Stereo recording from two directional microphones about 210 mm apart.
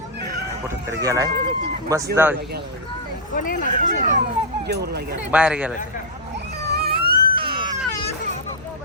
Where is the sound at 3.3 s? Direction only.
40° left (ahead or behind).